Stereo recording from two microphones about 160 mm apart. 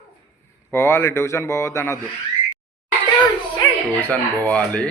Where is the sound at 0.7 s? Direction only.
15° left (ahead or behind).